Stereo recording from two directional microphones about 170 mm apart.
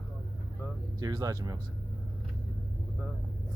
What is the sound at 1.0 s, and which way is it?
Speech, 25° right (ahead or behind).